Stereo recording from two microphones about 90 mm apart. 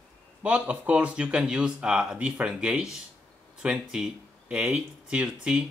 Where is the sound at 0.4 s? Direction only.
15° right (ahead or behind).